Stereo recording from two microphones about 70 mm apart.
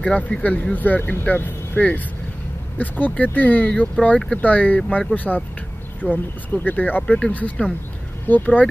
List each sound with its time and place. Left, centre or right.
0.0 s speech: centre